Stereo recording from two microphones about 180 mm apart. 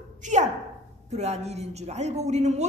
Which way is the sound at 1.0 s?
35° right (ahead or behind).